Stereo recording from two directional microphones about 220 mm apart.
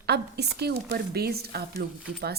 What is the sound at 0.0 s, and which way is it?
Speech, 45° right (ahead or behind).